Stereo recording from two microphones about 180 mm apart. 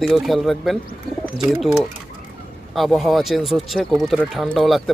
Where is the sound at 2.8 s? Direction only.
Centre (ahead or behind).